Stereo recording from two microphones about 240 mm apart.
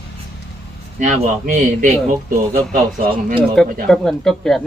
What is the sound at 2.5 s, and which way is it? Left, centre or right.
Speech, right.